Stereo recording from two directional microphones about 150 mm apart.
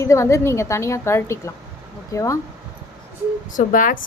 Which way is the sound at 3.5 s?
60° left (ahead or behind).